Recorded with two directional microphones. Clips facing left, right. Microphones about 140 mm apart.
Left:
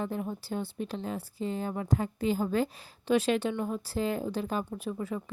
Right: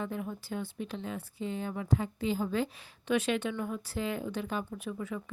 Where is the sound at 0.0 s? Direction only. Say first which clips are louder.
Left 3 dB; 35° left (ahead or behind).